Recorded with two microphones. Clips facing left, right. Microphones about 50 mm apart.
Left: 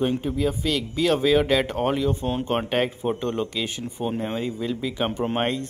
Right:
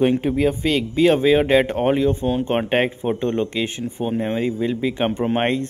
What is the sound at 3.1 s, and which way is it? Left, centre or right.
Speech, centre.